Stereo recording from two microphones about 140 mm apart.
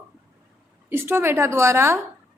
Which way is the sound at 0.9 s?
15° right (ahead or behind).